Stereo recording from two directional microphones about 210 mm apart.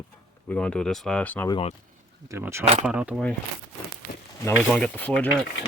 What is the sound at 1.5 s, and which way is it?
Speech, 25° left (ahead or behind).